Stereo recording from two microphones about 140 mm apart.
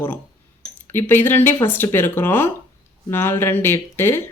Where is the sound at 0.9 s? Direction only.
15° left (ahead or behind).